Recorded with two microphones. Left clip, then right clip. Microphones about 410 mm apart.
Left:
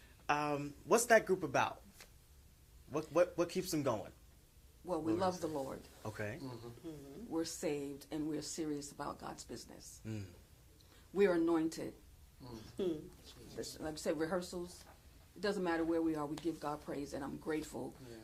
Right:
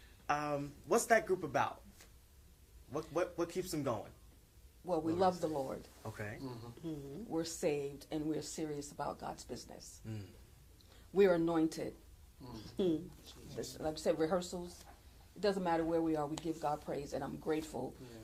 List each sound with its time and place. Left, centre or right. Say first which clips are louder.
0.3 s speech: even; left
2.9 s speech: left 4 dB; left
4.9 s speech: right 3 dB; centre
6.0 s speech: left 2 dB; left
6.4 s a man's voice: right 1 dB; centre
7.3 s speech: right 2 dB; centre
11.1 s speech: right 2 dB; centre
12.5 s speech: right 4 dB; right
13.2 s a sound: right 1 dB; centre
13.7 s speech: right 4 dB; centre